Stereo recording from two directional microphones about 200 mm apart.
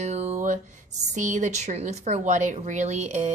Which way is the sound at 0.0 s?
35° right (ahead or behind).